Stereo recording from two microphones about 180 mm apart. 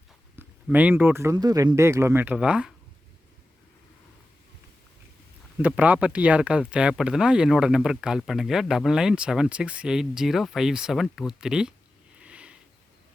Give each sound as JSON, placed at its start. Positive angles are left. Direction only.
{"t": 0.3, "sound": "speech", "side_deg": -10}
{"t": 5.6, "sound": "speech", "side_deg": -10}
{"t": 12.2, "sound": "sniff", "side_deg": -5}